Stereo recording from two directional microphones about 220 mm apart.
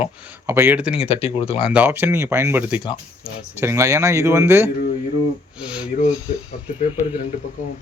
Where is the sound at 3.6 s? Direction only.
10° right (ahead or behind).